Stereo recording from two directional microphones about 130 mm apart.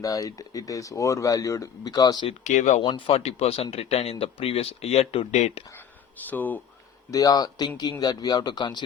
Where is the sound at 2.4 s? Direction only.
70° left (ahead or behind).